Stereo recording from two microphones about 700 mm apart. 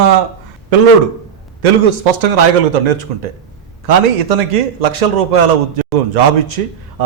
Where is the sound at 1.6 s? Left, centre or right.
Right.